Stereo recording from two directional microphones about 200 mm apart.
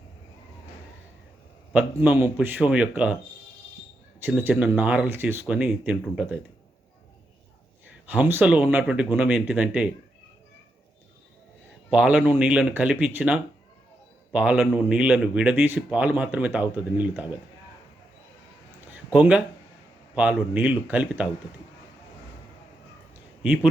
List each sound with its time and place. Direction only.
1.7 s a man's voice: 10° right (ahead or behind)
4.2 s a man's voice: 10° right (ahead or behind)
8.0 s a man's voice: 10° right (ahead or behind)
11.9 s a man's voice: 5° right (ahead or behind)
18.9 s a man's voice: 5° right (ahead or behind)